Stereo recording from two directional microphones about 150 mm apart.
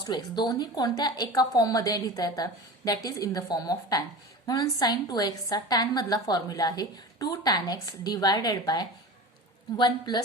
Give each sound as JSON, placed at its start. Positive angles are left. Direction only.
{"t": 0.0, "sound": "a woman's voice", "side_deg": 30}